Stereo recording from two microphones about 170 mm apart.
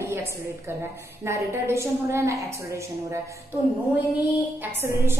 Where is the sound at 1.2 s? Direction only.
15° right (ahead or behind).